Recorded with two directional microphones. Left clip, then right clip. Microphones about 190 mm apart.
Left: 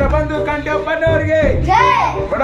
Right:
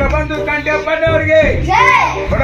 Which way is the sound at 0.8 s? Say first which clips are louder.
Right 1 dB; 10° left (ahead or behind).